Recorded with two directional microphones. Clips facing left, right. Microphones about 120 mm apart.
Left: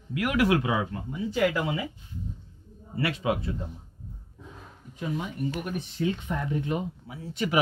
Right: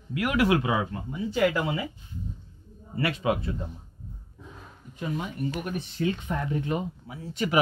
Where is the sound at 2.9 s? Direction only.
50° right (ahead or behind).